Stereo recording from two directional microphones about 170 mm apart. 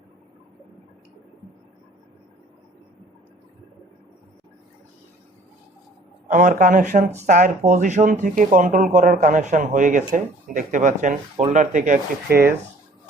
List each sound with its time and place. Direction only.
6.2 s speech: 50° right (ahead or behind)